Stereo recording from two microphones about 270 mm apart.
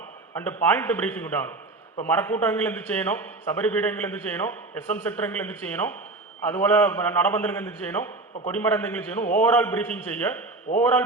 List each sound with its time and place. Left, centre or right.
0.3 s a man's voice: centre
10.7 s a man's voice: left